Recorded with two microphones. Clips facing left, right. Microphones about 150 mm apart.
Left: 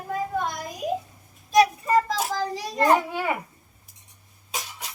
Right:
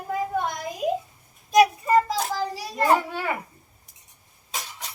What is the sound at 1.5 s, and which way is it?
Child singing, 15° right (ahead or behind).